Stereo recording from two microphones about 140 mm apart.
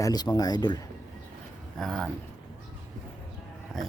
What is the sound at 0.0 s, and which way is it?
Speech, 25° left (ahead or behind).